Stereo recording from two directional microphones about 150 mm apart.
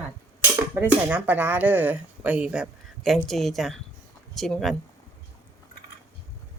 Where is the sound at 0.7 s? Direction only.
10° right (ahead or behind).